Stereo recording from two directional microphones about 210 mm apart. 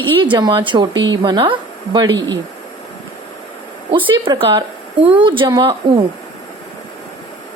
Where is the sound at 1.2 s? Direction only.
25° right (ahead or behind).